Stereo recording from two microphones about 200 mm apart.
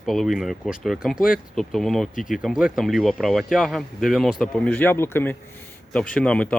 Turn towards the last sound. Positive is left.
turn(degrees=5)  # may be behind; listen again after turning